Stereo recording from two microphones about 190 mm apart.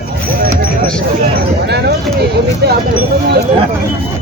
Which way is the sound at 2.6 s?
60° right (ahead or behind).